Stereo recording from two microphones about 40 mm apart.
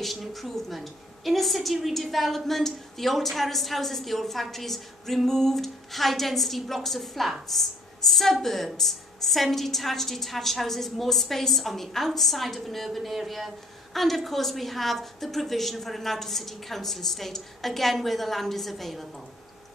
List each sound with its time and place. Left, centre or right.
0.0 s a woman's voice: centre